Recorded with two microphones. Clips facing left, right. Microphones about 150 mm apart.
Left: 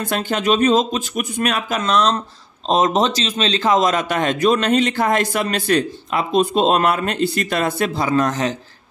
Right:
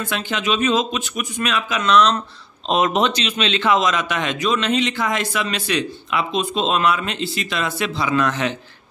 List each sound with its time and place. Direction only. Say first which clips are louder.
0.0 s a man's voice: left 4 dB; 45° left (ahead or behind)